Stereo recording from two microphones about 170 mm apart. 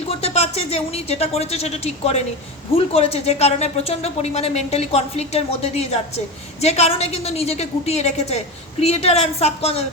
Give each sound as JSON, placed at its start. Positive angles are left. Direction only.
{"t": 0.2, "sound": "speech", "side_deg": 35}